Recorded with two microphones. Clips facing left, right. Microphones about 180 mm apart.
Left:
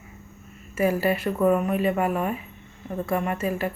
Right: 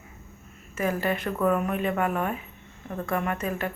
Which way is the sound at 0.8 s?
10° left (ahead or behind).